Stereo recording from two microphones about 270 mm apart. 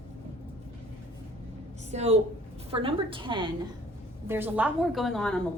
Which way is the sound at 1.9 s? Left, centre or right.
Right.